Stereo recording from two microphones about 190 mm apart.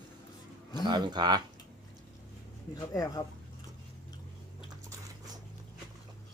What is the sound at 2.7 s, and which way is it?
Speech, 20° left (ahead or behind).